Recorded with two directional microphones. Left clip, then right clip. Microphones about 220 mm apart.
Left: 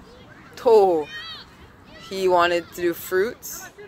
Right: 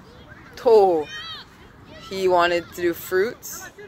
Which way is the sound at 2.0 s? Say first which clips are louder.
Even; centre (ahead or behind).